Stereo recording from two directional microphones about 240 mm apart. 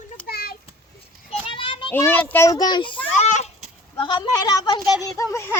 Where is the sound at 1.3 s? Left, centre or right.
Left.